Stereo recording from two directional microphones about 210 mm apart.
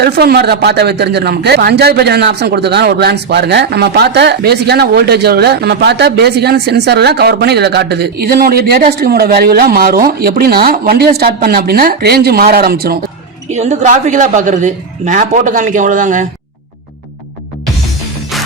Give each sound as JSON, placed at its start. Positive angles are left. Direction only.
{"t": 0.0, "sound": "a man's voice", "side_deg": -50}
{"t": 13.5, "sound": "a woman's voice", "side_deg": -35}